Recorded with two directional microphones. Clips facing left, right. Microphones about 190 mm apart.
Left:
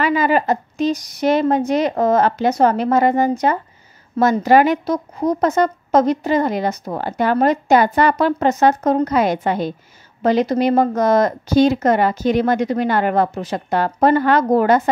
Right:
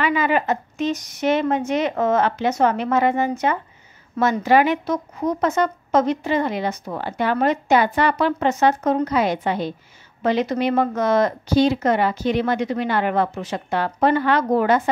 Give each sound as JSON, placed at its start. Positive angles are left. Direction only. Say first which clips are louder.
{"t": 0.0, "sound": "speech", "louder": "left 3 dB", "side_deg": 40}